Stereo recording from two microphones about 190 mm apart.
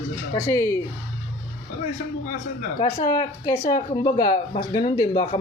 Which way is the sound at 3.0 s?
20° left (ahead or behind).